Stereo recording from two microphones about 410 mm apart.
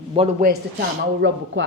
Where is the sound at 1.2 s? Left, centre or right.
Right.